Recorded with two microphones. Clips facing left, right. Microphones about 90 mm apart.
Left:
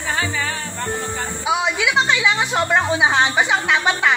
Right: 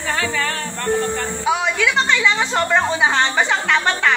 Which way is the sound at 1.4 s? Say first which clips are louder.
Right 1 dB; 15° left (ahead or behind).